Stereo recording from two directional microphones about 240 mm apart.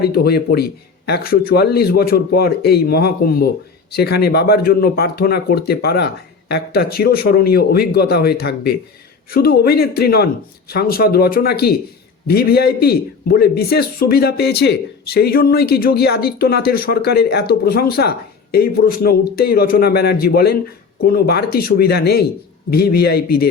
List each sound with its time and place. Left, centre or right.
0.0 s a man's voice: left